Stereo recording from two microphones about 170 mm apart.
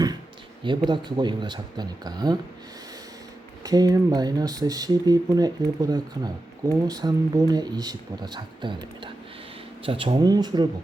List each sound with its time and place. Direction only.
0.6 s speech: 30° right (ahead or behind)
3.6 s speech: 20° right (ahead or behind)